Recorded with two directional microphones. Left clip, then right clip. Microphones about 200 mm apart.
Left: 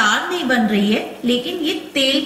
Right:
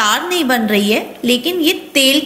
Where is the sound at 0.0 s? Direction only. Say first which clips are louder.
Right 2 dB; 45° right (ahead or behind).